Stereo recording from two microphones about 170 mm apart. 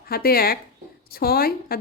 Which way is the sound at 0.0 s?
65° left (ahead or behind).